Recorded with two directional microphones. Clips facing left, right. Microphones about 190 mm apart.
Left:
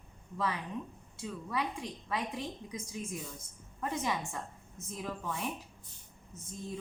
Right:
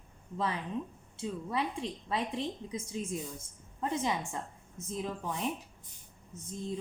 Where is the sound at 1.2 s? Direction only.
25° right (ahead or behind).